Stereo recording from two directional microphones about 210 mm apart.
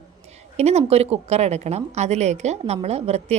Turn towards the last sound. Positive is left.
turn(degrees=-30)  # may be behind; listen again after turning